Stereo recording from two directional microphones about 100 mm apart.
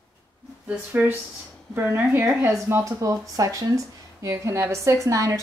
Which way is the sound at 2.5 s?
30° right (ahead or behind).